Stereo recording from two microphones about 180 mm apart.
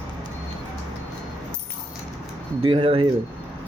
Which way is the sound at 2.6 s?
30° right (ahead or behind).